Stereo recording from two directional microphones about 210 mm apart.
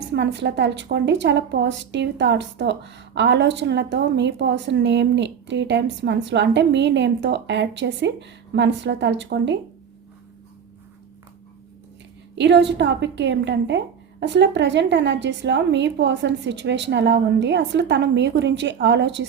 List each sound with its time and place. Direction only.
0.1 s a woman's voice: 55° right (ahead or behind)
12.4 s a woman's voice: 55° right (ahead or behind)